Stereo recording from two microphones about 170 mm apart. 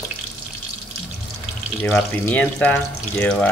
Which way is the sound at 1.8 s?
10° left (ahead or behind).